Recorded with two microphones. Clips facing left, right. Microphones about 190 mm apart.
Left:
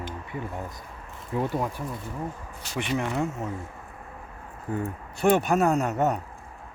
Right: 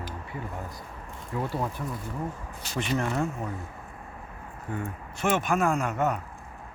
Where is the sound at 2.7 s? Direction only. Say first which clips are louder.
Left 1 dB; 15° left (ahead or behind).